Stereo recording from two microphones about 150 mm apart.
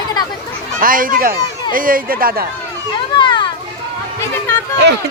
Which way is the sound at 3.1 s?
35° left (ahead or behind).